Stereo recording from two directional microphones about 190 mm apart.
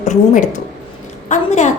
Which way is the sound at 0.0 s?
40° left (ahead or behind).